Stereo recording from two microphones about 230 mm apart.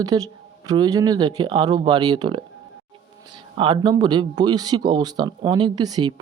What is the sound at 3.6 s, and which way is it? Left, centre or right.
Speech, centre.